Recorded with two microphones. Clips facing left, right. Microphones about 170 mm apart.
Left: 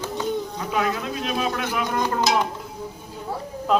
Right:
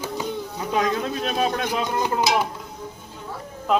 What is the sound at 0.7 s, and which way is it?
A man's voice, 35° right (ahead or behind).